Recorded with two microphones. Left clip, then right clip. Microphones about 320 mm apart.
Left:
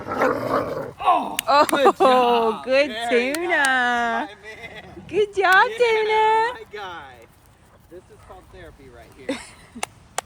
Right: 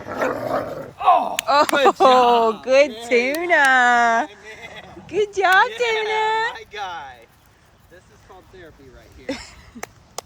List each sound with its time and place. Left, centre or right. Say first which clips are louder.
0.0 s dog: left 2 dB; centre
1.6 s speech: right 1 dB; centre
1.9 s speech: right 3 dB; centre
4.3 s speech: even; centre
6.5 s a sound: right 3 dB; right
9.2 s a sound: even; centre